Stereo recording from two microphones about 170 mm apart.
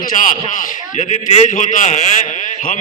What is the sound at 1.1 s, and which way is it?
A man's voice, 40° left (ahead or behind).